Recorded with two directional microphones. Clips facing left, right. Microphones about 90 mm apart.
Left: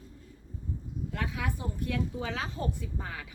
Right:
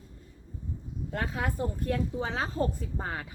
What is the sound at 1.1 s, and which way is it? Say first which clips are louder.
Speech: right 4 dB; 40° right (ahead or behind).